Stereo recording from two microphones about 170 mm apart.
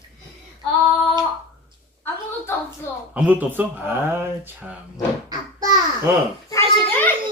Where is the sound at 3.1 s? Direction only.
10° right (ahead or behind).